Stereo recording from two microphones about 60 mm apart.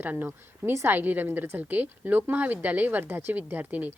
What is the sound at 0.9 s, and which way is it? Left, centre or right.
A woman's voice, right.